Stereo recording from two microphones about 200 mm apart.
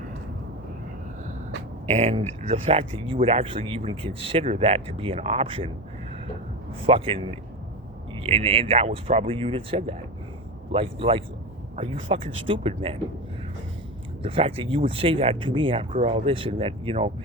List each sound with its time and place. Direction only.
1.9 s speech: 40° right (ahead or behind)
6.8 s speech: 30° right (ahead or behind)
14.2 s speech: 25° right (ahead or behind)